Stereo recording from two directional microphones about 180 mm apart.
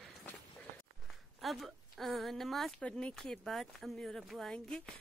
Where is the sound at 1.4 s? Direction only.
Centre (ahead or behind).